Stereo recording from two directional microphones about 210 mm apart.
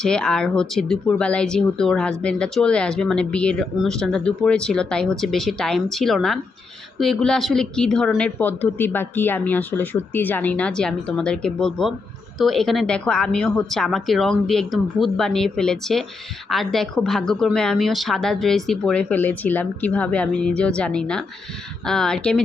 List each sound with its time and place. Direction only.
0.0 s speech: 5° left (ahead or behind)